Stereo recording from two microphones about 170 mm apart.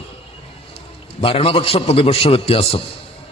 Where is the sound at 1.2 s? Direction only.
35° left (ahead or behind).